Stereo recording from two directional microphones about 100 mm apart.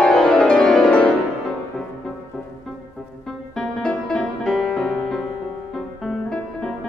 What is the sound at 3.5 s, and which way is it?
Music, 5° left (ahead or behind).